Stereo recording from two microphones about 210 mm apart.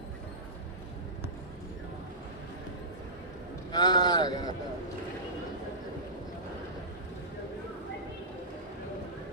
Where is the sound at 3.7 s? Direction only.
20° left (ahead or behind).